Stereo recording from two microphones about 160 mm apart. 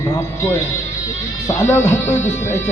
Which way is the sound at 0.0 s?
15° left (ahead or behind).